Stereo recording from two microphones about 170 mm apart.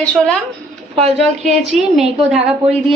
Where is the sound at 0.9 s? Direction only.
35° right (ahead or behind).